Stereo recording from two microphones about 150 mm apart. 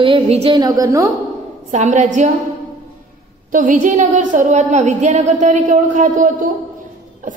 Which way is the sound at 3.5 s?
65° right (ahead or behind).